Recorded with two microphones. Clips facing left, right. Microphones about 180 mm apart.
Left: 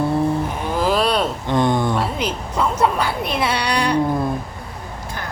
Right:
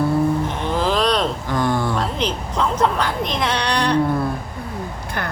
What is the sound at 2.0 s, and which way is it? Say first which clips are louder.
A woman's voice: even; 10° left (ahead or behind).